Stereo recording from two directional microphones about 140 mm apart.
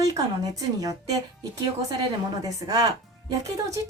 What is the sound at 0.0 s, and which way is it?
Speech, 25° right (ahead or behind).